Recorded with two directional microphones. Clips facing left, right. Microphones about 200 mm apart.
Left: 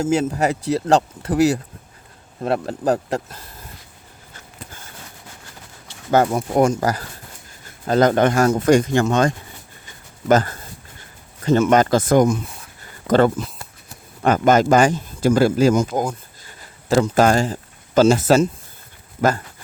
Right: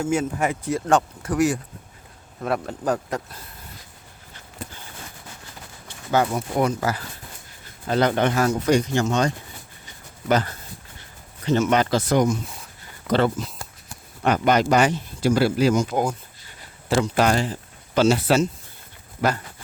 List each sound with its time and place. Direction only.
0.2 s speech: 40° left (ahead or behind)
2.4 s speech: 30° left (ahead or behind)
6.1 s speech: 45° left (ahead or behind)